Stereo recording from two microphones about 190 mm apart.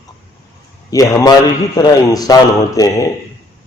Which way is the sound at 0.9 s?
15° left (ahead or behind).